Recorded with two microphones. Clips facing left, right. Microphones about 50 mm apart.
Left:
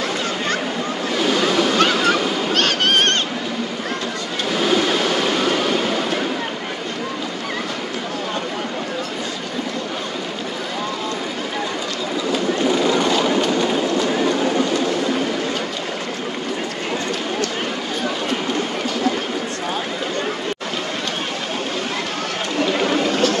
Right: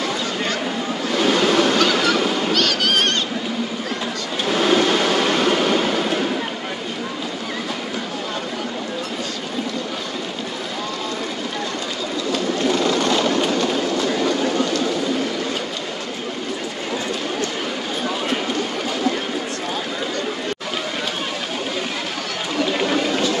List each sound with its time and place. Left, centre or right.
1.2 s waves: centre
2.5 s a sound: left
4.5 s vehicle: centre
12.3 s train: centre